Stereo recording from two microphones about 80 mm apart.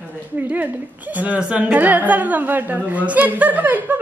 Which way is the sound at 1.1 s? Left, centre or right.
Centre.